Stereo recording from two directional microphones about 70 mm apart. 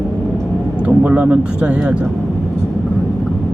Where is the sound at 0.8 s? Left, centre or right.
Centre.